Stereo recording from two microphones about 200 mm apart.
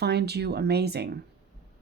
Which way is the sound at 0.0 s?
55° right (ahead or behind).